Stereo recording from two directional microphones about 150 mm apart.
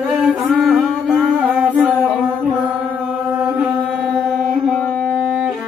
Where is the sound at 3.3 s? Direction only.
10° right (ahead or behind).